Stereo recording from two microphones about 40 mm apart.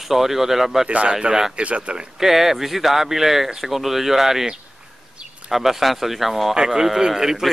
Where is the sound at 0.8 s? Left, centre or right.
Right.